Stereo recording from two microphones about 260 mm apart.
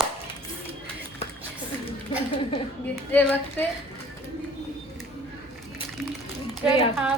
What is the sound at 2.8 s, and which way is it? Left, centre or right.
Speech, centre.